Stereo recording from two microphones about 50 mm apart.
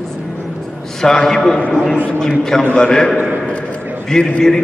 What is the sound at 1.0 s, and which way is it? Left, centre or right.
Speech, centre.